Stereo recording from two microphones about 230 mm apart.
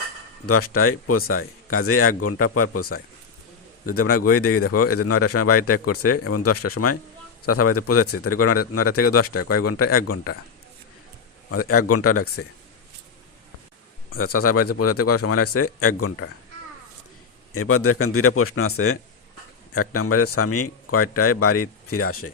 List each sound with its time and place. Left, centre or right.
0.4 s a man's voice: left
11.5 s speech: left
14.1 s speech: left
17.5 s speech: left
19.7 s speech: left